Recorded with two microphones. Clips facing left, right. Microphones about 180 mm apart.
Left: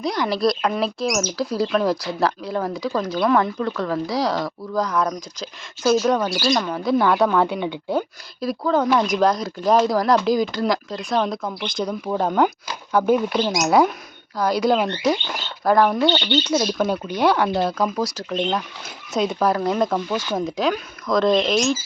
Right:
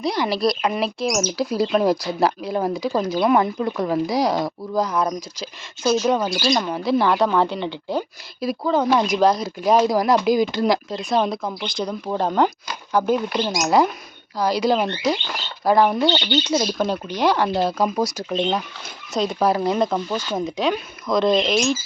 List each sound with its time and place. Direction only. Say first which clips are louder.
0.0 s speech: even; 5° right (ahead or behind)
2.6 s speech: right 2 dB; 25° right (ahead or behind)
4.8 s speech: even; 5° right (ahead or behind)
7.9 s speech: left 2 dB; centre (ahead or behind)
16.8 s speech: left 1 dB; 5° left (ahead or behind)
17.8 s speech: right 2 dB; 15° right (ahead or behind)
19.1 s speech: even; 5° left (ahead or behind)
19.5 s speech: even; 5° right (ahead or behind)